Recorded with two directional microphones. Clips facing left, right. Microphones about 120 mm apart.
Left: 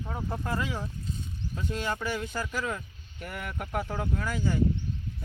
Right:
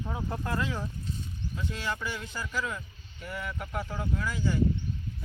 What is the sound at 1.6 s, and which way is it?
Speech, 45° left (ahead or behind).